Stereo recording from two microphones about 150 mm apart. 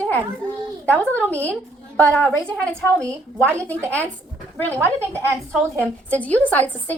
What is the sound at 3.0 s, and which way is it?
Speech, 15° right (ahead or behind).